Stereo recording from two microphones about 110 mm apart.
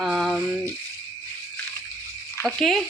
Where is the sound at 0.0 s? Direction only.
5° right (ahead or behind).